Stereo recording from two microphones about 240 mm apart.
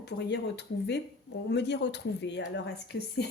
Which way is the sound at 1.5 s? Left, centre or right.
Left.